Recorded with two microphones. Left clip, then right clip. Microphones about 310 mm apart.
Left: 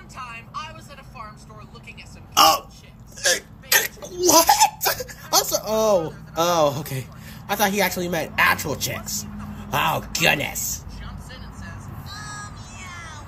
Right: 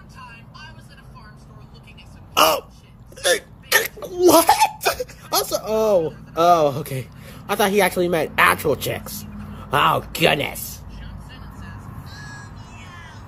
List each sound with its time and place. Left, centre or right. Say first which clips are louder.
0.2 s music: left 8 dB; left
2.3 s speech: left 1 dB; centre
3.2 s hiccup: right 2 dB; centre